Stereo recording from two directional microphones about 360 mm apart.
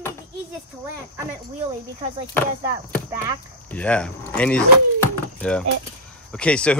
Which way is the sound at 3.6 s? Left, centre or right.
Centre.